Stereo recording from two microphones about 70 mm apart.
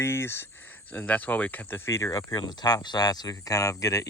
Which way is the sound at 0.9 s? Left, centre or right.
Left.